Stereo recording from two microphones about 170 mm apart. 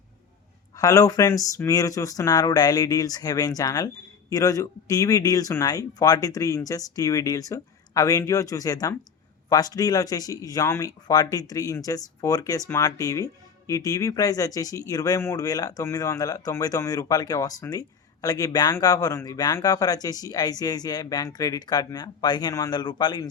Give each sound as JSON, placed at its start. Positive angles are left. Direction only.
{"t": 0.8, "sound": "speech", "side_deg": 20}